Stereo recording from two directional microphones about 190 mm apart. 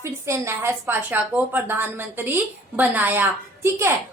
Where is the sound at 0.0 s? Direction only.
15° right (ahead or behind).